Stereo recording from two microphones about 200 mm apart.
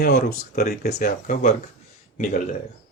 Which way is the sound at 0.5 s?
50° left (ahead or behind).